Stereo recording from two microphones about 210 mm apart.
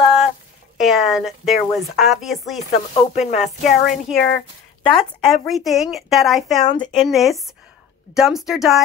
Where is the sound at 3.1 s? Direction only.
35° left (ahead or behind).